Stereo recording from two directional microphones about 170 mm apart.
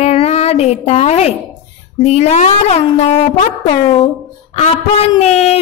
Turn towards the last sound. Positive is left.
turn(degrees=40)  # may be behind; listen again after turning